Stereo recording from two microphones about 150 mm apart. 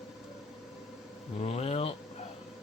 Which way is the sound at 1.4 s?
45° left (ahead or behind).